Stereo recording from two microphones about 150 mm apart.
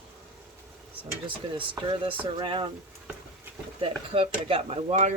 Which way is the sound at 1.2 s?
35° right (ahead or behind).